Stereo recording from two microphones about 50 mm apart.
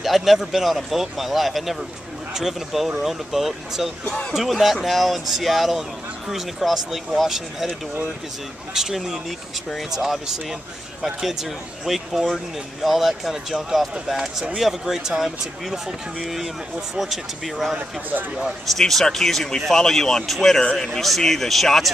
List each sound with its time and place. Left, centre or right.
0.0 s speech: centre
4.0 s speech: centre
4.3 s speech: centre
8.7 s speech: centre